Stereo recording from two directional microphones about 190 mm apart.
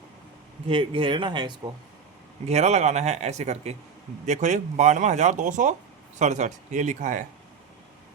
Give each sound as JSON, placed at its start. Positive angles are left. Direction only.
{"t": 0.7, "sound": "speech", "side_deg": -25}
{"t": 2.5, "sound": "speech", "side_deg": -35}